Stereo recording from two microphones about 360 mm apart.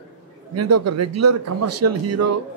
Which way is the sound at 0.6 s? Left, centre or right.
Right.